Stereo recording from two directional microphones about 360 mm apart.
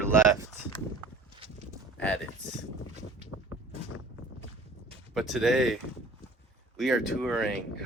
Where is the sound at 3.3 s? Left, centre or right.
Left.